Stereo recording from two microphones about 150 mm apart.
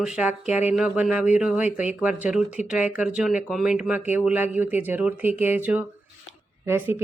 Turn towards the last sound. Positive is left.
turn(degrees=-15)  # may be behind; listen again after turning